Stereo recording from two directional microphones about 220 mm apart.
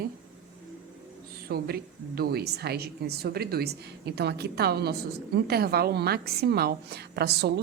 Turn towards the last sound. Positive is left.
turn(degrees=-45)  # may be behind; listen again after turning